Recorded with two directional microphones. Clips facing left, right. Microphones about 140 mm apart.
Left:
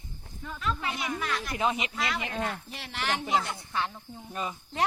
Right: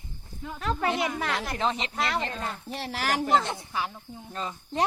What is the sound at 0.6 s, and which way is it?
Speech, 45° right (ahead or behind).